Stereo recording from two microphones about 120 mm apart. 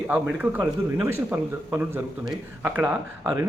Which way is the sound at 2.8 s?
15° right (ahead or behind).